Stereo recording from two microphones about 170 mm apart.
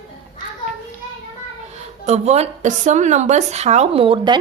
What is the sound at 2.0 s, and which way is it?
A woman's voice, 40° right (ahead or behind).